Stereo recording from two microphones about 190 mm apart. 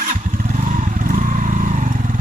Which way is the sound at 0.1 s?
45° right (ahead or behind).